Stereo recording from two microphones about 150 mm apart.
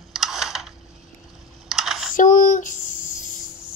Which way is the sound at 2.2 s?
60° left (ahead or behind).